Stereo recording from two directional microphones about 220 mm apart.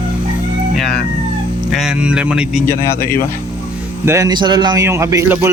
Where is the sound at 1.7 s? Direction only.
5° right (ahead or behind).